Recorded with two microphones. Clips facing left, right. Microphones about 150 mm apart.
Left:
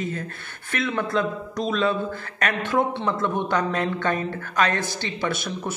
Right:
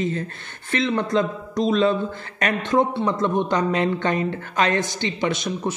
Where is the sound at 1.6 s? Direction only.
40° right (ahead or behind).